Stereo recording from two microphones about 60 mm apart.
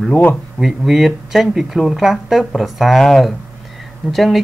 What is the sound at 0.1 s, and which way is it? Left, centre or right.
Speech, left.